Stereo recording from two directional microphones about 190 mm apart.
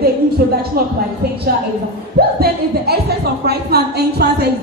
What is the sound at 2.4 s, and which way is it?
Speech, 55° right (ahead or behind).